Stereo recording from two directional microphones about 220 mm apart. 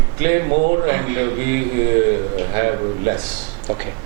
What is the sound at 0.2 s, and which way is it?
Speech, 15° right (ahead or behind).